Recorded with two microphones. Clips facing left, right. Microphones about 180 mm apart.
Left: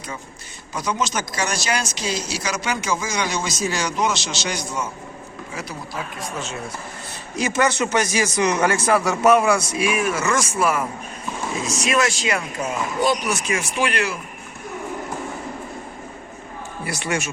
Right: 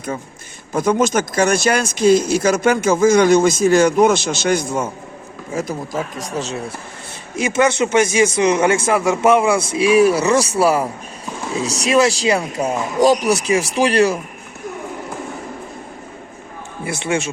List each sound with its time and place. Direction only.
0.7 s speech: 50° right (ahead or behind); by 6.6 s 35° right (ahead or behind)
7.3 s speech: 25° right (ahead or behind)
16.8 s speech: 25° right (ahead or behind)